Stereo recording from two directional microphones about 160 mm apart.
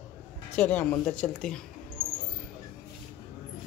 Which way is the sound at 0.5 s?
10° left (ahead or behind).